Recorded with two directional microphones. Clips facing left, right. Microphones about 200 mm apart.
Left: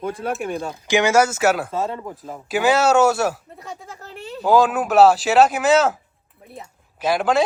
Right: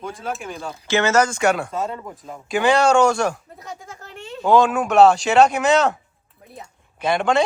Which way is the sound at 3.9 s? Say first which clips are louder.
Left 1 dB; 35° left (ahead or behind).